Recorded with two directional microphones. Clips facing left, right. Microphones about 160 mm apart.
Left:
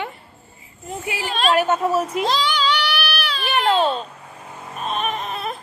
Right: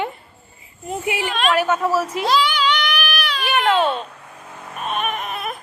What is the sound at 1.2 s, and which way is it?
Speech, 35° left (ahead or behind).